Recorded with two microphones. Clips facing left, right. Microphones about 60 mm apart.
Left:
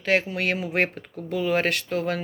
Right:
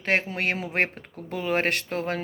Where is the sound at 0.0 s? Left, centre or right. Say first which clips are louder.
Left 2 dB; right.